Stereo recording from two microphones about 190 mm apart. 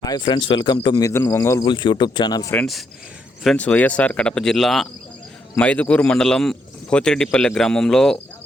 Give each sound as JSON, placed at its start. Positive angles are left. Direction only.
{"t": 0.0, "sound": "speech", "side_deg": 20}
{"t": 2.6, "sound": "speech", "side_deg": 0}